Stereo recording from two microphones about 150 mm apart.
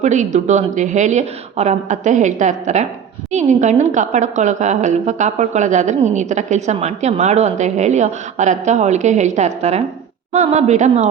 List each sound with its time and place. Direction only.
0.0 s a woman's voice: 55° right (ahead or behind)